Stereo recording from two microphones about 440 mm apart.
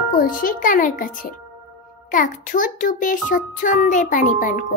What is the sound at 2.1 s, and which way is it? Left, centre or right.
Music, centre.